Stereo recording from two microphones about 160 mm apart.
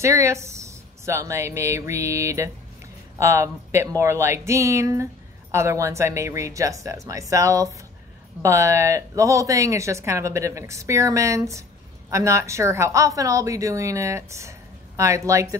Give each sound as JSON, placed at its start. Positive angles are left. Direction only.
{"t": 0.0, "sound": "a woman's voice", "side_deg": -20}